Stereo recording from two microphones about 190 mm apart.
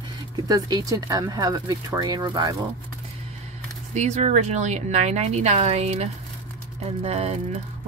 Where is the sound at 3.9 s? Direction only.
35° right (ahead or behind).